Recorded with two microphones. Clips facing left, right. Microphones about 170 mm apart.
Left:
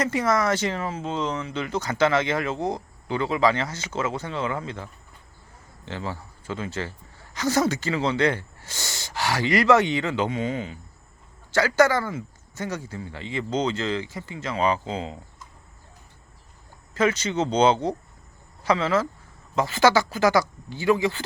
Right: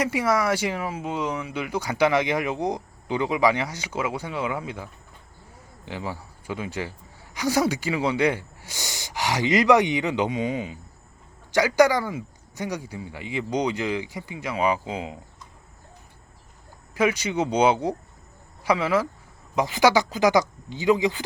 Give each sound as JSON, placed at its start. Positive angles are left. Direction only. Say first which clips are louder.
{"t": 0.0, "sound": "a man's voice", "louder": "even", "side_deg": -10}
{"t": 16.9, "sound": "a man's voice", "louder": "even", "side_deg": -10}